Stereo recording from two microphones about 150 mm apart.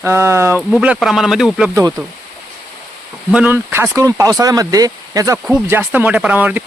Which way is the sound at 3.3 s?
10° right (ahead or behind).